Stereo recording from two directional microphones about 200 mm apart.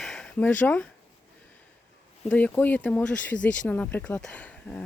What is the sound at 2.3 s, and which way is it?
Speech, 5° left (ahead or behind).